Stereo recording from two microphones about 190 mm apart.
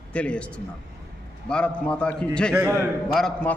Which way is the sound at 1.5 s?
5° left (ahead or behind).